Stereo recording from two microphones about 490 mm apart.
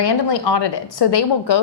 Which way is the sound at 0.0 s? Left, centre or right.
Left.